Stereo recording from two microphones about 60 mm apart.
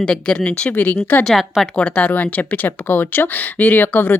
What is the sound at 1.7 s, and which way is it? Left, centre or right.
A woman's voice, left.